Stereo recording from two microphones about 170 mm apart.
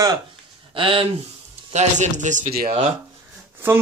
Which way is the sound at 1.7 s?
45° right (ahead or behind).